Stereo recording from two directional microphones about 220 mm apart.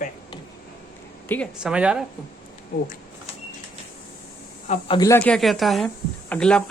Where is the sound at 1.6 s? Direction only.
5° right (ahead or behind).